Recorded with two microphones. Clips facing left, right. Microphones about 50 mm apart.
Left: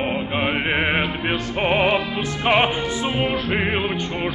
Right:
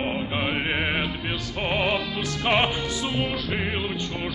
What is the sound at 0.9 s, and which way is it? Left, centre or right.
Music, left.